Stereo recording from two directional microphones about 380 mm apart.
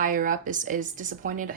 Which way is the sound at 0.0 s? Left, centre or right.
Right.